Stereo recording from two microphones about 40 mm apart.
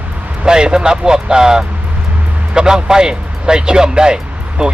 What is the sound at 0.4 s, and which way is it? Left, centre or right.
Speech, centre.